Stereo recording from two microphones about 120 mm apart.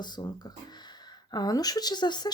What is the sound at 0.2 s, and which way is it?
Speech, 40° left (ahead or behind).